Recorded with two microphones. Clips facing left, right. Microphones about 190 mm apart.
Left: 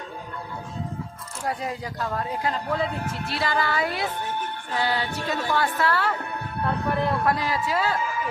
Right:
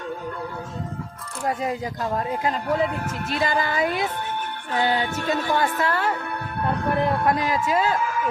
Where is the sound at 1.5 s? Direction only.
20° right (ahead or behind).